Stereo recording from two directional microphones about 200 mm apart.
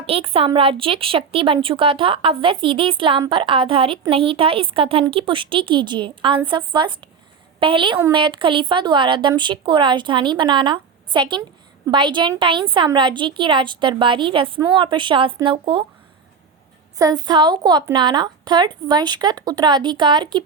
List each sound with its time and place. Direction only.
0.0 s a woman's voice: 30° right (ahead or behind)
17.0 s a woman's voice: 20° right (ahead or behind)